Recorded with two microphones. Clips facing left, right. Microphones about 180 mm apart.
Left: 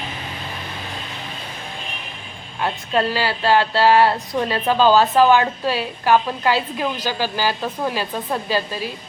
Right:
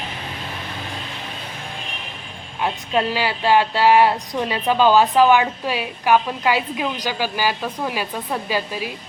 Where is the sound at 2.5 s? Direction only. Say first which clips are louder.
Even; 15° right (ahead or behind).